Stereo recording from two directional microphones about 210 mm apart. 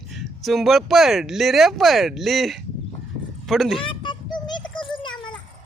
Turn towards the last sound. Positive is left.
turn(degrees=20)  # may be behind; listen again after turning